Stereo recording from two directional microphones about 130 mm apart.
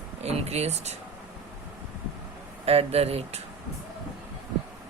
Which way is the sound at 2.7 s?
50° right (ahead or behind).